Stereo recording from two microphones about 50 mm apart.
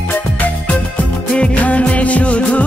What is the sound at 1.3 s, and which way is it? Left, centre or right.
Music of bollywood, left.